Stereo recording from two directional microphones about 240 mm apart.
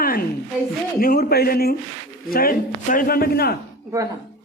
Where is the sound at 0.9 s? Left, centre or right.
Left.